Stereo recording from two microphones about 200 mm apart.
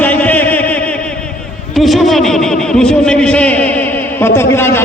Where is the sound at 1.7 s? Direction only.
Centre (ahead or behind).